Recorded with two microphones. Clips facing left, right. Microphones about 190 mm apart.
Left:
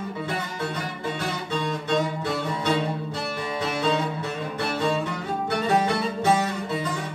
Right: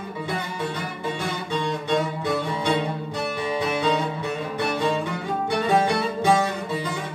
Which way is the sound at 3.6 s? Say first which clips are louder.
Right 1 dB; 15° right (ahead or behind).